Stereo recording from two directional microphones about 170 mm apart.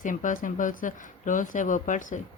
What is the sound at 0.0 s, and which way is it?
Speech, 50° left (ahead or behind).